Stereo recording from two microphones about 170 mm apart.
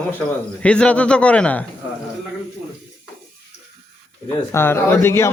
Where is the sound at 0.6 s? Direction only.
5° left (ahead or behind).